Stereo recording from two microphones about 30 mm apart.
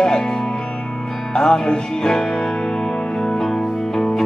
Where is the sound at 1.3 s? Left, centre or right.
Left.